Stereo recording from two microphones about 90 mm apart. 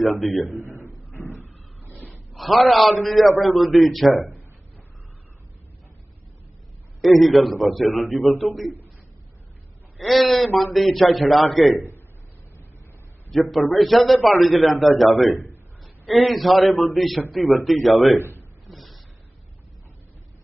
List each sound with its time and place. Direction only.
0.0 s a man's voice: centre (ahead or behind)
0.6 s a man's voice: 30° left (ahead or behind)
2.3 s a man's voice: centre (ahead or behind)
7.0 s a man's voice: centre (ahead or behind)
9.9 s a man's voice: centre (ahead or behind)
13.3 s a man's voice: centre (ahead or behind)
15.3 s a sound: 35° left (ahead or behind)
15.8 s a man's voice: centre (ahead or behind)
18.1 s a man's voice: 30° left (ahead or behind)
18.7 s a sound: centre (ahead or behind)